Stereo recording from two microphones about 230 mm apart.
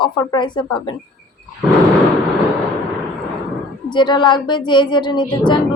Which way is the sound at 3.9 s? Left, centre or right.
Centre.